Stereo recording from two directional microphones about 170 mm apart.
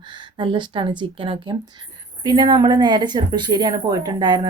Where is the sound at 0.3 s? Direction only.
30° right (ahead or behind).